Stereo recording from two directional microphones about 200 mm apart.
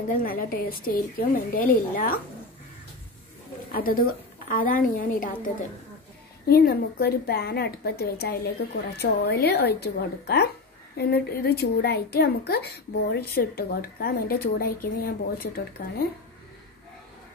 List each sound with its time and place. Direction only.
0.2 s a woman's voice: 45° left (ahead or behind)
3.7 s a woman's voice: 45° left (ahead or behind)
6.4 s a woman's voice: 50° left (ahead or behind)